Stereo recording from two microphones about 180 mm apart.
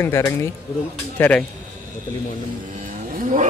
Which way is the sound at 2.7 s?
50° right (ahead or behind).